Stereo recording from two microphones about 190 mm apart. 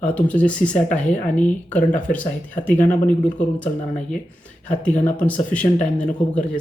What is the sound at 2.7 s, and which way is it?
Speech, 40° left (ahead or behind).